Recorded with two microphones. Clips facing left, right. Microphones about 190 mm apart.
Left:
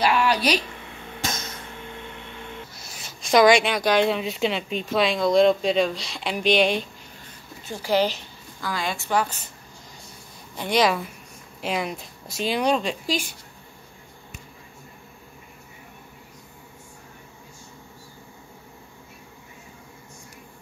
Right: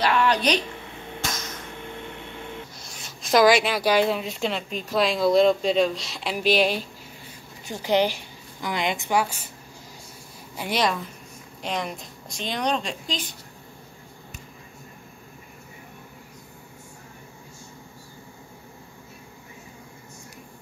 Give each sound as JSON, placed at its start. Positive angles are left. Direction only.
{"t": 0.0, "sound": "a sound", "side_deg": 10}
{"t": 2.8, "sound": "a woman's voice", "side_deg": 0}
{"t": 7.6, "sound": "a woman's voice", "side_deg": -15}
{"t": 10.5, "sound": "a woman's voice", "side_deg": -5}